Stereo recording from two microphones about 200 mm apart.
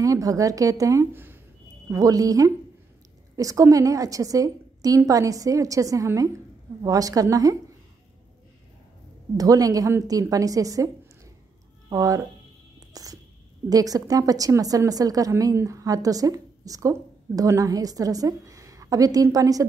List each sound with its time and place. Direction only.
0.0 s a woman's voice: 15° right (ahead or behind)
9.4 s a woman's voice: 15° right (ahead or behind)
11.9 s a woman's voice: 15° right (ahead or behind)
12.9 s whispering: 15° right (ahead or behind)
13.7 s a woman's voice: 20° right (ahead or behind)